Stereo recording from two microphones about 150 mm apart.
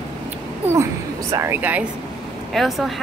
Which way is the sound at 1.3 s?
15° right (ahead or behind).